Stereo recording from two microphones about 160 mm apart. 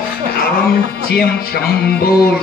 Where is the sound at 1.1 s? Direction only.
75° left (ahead or behind).